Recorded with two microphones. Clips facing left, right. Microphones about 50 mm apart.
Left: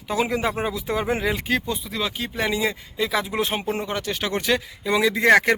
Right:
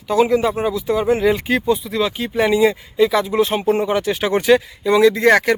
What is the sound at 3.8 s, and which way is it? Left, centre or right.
Speech, centre.